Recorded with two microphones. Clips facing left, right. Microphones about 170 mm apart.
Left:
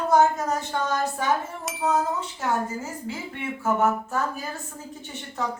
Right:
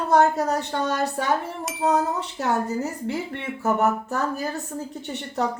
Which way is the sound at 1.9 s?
65° right (ahead or behind).